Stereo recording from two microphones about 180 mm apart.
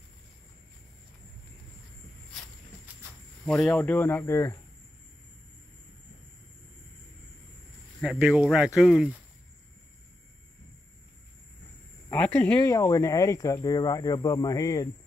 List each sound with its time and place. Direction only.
3.6 s speech: 10° left (ahead or behind)
8.0 s speech: centre (ahead or behind)
12.1 s cricket: 10° left (ahead or behind)
12.5 s speech: 15° left (ahead or behind)